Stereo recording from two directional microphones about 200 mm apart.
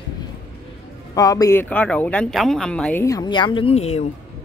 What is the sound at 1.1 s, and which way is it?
Speech, 15° left (ahead or behind).